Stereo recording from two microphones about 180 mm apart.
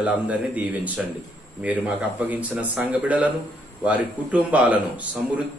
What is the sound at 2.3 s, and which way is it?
Speech, 10° right (ahead or behind).